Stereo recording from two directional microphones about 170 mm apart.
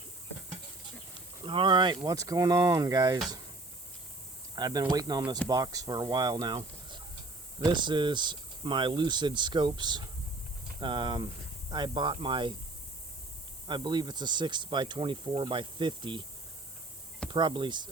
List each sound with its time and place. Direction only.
1.5 s speech: 30° right (ahead or behind)
4.5 s speech: 25° right (ahead or behind)
13.7 s speech: 25° right (ahead or behind)
17.3 s speech: 30° right (ahead or behind)